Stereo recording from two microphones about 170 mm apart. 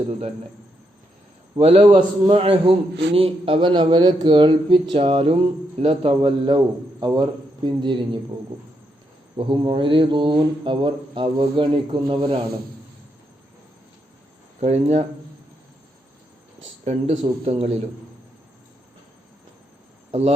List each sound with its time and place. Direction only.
1.5 s speech: 35° right (ahead or behind)
2.0 s speech: 30° right (ahead or behind)
9.3 s speech: 30° right (ahead or behind)
14.6 s speech: 40° right (ahead or behind)
16.8 s speech: 35° right (ahead or behind)